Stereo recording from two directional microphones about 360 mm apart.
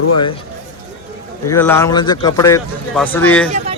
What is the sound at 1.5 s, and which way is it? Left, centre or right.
Speech, centre.